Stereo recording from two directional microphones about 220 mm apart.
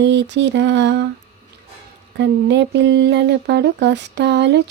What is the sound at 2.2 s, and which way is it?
Speech, 50° right (ahead or behind).